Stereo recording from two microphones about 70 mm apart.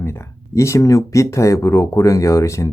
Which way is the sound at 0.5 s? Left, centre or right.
Left.